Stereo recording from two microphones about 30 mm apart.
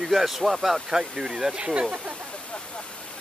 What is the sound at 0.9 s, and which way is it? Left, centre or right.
Speech, centre.